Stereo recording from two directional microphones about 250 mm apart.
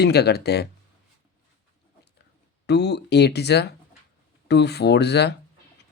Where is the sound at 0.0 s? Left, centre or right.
Left.